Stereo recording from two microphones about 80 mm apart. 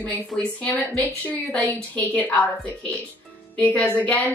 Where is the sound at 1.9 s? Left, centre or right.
Left.